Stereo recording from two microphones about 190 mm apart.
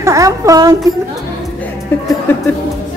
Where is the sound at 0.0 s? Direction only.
15° right (ahead or behind).